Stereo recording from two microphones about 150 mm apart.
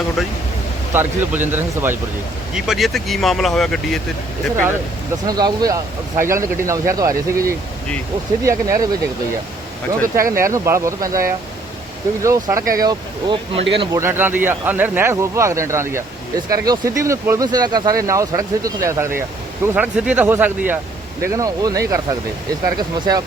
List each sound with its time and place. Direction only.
0.2 s speech: centre (ahead or behind)
0.9 s speech: 15° right (ahead or behind)
2.6 s speech: centre (ahead or behind)
5.2 s speech: 25° right (ahead or behind)
10.3 s speech: 20° right (ahead or behind)
12.2 s speech: 20° right (ahead or behind)
14.0 s speech: 15° right (ahead or behind)
21.2 s speech: 20° right (ahead or behind)